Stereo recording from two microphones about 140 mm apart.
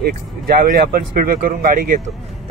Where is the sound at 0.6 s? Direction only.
90° right.